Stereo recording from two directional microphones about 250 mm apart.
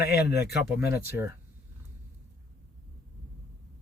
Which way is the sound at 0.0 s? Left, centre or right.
Left.